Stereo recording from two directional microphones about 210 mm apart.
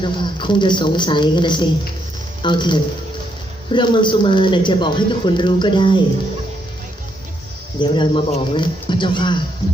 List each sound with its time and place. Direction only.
0.0 s speech: 20° left (ahead or behind)
7.8 s speech: 20° left (ahead or behind)